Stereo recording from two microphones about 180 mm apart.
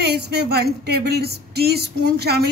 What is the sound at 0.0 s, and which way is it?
A woman's voice, 65° right (ahead or behind).